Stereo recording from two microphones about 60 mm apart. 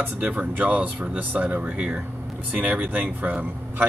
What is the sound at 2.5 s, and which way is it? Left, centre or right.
Speech, right.